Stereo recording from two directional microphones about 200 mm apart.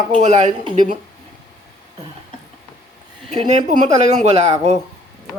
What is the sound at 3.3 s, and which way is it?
Speech, 35° right (ahead or behind).